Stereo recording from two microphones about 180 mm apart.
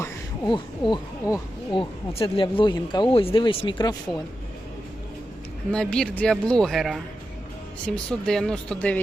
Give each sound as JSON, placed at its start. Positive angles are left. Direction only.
{"t": 0.0, "sound": "speech", "side_deg": 25}
{"t": 5.7, "sound": "speech", "side_deg": 5}